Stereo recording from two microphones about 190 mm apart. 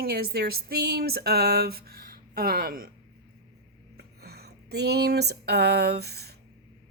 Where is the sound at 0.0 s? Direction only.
55° right (ahead or behind).